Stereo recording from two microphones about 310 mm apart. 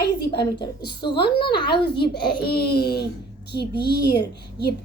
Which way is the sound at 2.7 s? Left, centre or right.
Left.